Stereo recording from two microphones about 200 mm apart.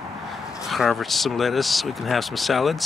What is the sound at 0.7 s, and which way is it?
Speech, centre (ahead or behind).